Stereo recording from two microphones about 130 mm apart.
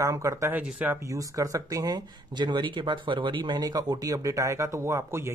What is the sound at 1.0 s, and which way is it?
Speech, 25° right (ahead or behind).